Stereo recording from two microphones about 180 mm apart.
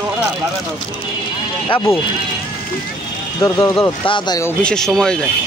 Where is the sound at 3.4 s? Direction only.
15° left (ahead or behind).